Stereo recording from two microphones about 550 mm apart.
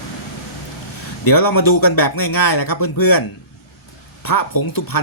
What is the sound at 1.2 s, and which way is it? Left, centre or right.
Speech, left.